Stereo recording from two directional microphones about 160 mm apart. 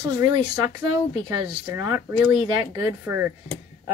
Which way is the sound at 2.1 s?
5° right (ahead or behind).